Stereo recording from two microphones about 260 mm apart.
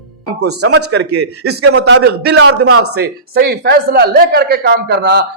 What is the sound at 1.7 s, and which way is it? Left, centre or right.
Speech, right.